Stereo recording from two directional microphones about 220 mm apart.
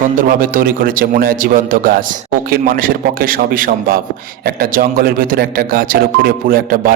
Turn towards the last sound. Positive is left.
turn(degrees=-40)  # may be behind; listen again after turning